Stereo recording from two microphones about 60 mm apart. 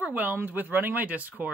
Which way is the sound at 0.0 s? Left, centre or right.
Right.